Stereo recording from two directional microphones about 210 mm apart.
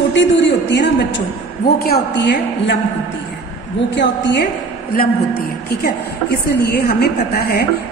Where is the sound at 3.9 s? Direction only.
55° left (ahead or behind).